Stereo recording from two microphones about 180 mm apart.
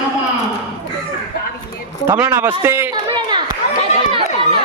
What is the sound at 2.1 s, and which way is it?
Speech, 10° right (ahead or behind).